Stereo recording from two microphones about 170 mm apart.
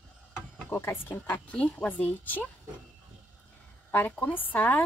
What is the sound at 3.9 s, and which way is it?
Speech, 10° left (ahead or behind).